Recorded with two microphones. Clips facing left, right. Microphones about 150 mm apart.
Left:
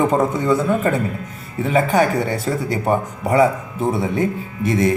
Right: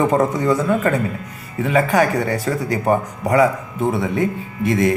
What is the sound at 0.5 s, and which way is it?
Speech, 30° left (ahead or behind).